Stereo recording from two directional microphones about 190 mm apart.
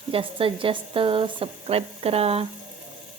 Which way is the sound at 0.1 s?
30° right (ahead or behind).